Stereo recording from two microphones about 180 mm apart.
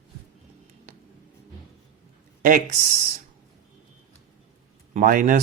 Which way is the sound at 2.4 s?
50° right (ahead or behind).